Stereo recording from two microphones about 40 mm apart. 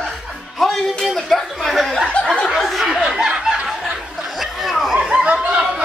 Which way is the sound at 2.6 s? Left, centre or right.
Centre.